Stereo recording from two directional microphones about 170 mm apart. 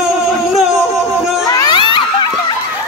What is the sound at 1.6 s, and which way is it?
Children shouting, 25° left (ahead or behind).